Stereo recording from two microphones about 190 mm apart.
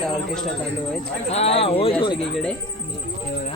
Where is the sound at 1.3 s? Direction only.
35° left (ahead or behind).